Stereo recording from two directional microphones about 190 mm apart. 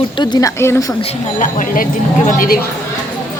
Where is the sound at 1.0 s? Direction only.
40° left (ahead or behind).